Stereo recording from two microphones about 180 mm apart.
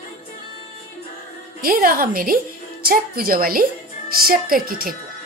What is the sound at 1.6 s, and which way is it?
A woman's voice, 55° right (ahead or behind).